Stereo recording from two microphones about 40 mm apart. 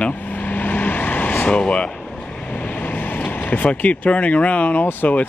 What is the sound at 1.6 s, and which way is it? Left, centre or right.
Speech, left.